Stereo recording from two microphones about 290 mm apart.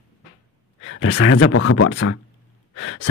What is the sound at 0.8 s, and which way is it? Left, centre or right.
Speech, left.